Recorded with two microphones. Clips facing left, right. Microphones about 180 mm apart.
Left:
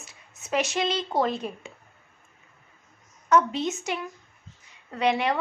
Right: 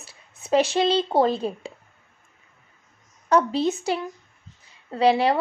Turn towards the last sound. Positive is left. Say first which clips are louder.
# right 5 dB
turn(degrees=-30)  # may be behind; listen again after turning